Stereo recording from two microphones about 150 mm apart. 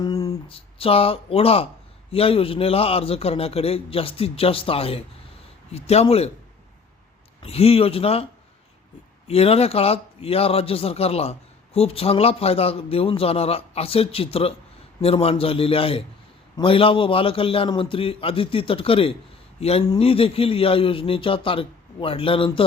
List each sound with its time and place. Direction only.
0.0 s a sound: 25° left (ahead or behind)
0.4 s a man's voice: 40° left (ahead or behind)
7.4 s a man's voice: 40° left (ahead or behind)